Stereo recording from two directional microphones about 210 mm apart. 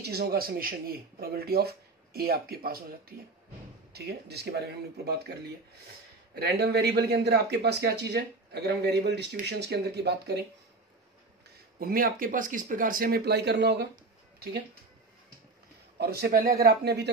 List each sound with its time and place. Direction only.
0.0 s speech: 50° right (ahead or behind)
6.4 s speech: 50° right (ahead or behind)
11.8 s speech: 45° right (ahead or behind)
16.0 s speech: 50° right (ahead or behind)